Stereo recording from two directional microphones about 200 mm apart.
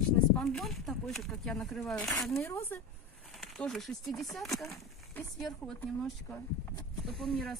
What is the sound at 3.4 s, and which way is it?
Speech, centre (ahead or behind).